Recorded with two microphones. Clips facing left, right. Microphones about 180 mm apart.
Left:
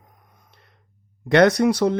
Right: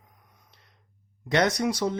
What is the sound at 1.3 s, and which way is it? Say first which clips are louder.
Speech: left 8 dB; 60° left (ahead or behind).